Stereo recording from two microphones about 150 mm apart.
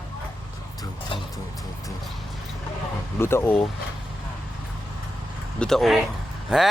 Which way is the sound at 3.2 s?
15° left (ahead or behind).